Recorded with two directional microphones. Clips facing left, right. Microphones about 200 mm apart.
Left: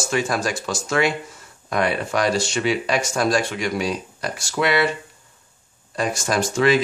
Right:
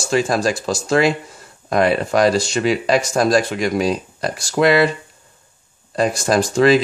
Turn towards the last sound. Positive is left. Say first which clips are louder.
# right 5 dB
turn(degrees=-35)  # may be behind; listen again after turning